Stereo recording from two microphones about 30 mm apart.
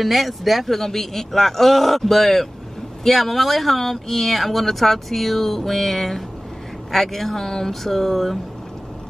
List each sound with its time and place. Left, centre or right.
0.0 s speech: centre
0.7 s a man's voice: centre